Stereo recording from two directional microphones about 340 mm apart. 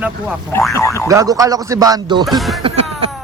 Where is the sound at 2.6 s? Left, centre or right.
Centre.